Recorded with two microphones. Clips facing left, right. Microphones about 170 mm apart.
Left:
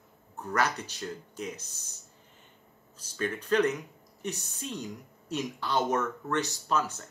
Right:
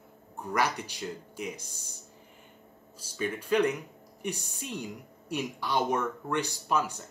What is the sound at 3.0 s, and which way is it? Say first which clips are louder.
Speech: even; 10° right (ahead or behind).